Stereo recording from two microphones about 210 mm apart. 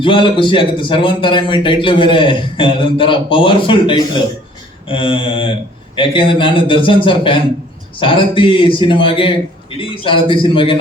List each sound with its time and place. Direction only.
0.0 s a man's voice: 25° left (ahead or behind)